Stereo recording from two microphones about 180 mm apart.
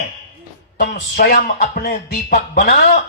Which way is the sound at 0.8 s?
50° left (ahead or behind).